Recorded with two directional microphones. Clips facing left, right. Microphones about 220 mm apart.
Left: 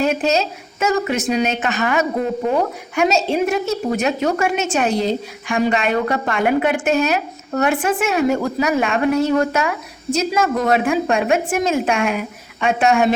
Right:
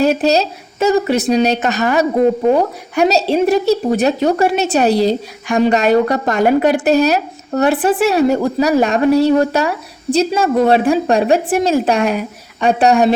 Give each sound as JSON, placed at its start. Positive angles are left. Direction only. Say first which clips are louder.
{"t": 0.0, "sound": "a woman's voice", "louder": "right 5 dB", "side_deg": -35}